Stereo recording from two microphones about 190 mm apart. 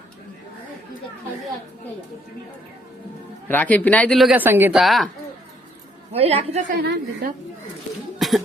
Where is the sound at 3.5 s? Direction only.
10° left (ahead or behind).